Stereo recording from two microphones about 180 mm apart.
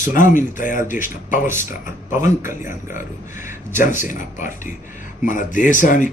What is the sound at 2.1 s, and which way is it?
Speech, 15° right (ahead or behind).